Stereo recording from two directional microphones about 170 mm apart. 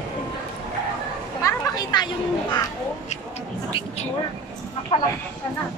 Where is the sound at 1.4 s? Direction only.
20° left (ahead or behind).